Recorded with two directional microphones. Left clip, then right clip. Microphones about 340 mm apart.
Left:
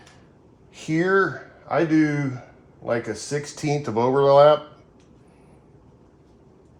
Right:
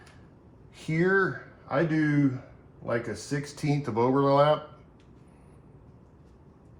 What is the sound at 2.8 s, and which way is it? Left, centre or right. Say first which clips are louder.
Speech: left 5 dB; left.